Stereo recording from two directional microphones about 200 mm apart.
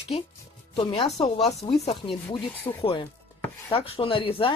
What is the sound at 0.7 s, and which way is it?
Speech, 30° left (ahead or behind).